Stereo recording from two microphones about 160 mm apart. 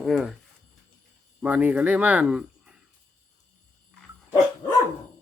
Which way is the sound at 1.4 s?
10° right (ahead or behind).